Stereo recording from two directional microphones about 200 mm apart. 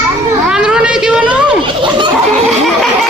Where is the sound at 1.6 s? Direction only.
25° right (ahead or behind).